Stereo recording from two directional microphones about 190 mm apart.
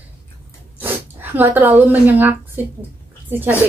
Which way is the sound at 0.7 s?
10° right (ahead or behind).